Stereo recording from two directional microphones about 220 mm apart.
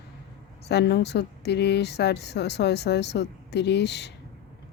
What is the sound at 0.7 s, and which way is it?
Speech, 50° left (ahead or behind).